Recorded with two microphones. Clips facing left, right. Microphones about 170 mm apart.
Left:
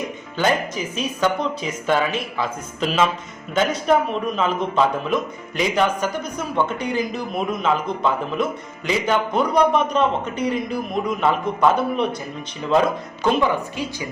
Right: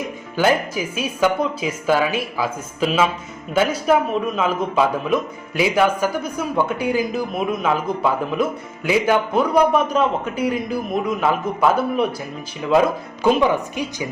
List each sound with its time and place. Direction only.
0.3 s a man's voice: 5° right (ahead or behind)
13.2 s a woman's voice: 15° right (ahead or behind)